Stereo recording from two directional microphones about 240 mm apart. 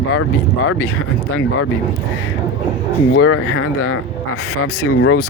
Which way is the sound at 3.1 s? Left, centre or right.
Left.